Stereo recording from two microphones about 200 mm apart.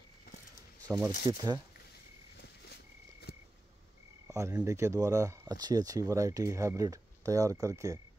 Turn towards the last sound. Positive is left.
turn(degrees=-15)  # may be behind; listen again after turning